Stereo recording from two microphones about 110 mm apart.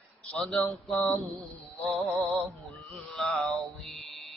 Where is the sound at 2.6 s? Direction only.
Centre (ahead or behind).